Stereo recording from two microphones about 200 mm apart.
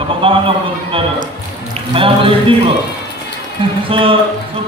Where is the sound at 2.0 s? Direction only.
25° right (ahead or behind).